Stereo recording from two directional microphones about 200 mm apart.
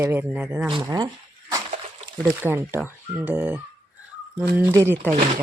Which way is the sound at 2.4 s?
10° right (ahead or behind).